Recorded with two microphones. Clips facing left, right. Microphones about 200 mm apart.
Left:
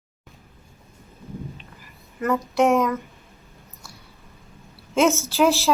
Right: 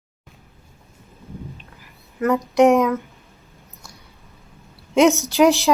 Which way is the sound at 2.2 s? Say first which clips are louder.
Right 5 dB; 15° right (ahead or behind).